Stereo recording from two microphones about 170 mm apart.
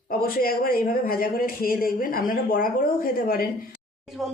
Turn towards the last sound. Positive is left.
turn(degrees=0)  # may be behind; listen again after turning